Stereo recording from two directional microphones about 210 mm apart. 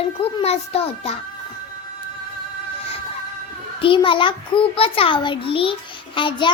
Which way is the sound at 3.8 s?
25° left (ahead or behind).